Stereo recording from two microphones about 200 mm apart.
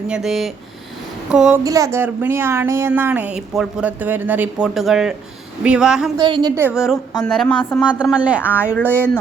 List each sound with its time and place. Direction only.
0.1 s speech: centre (ahead or behind)
1.6 s speech: 15° right (ahead or behind)
6.1 s a woman's voice: 20° right (ahead or behind)
6.7 s speech: 5° right (ahead or behind)
8.8 s speech: 10° left (ahead or behind)